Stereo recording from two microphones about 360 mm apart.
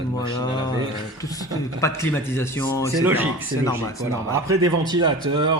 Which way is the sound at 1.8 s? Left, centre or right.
Centre.